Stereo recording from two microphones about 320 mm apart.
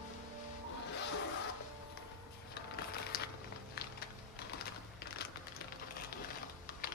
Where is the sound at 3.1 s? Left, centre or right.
Left.